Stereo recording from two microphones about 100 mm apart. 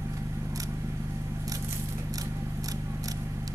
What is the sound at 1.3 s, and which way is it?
Scissors, 30° right (ahead or behind).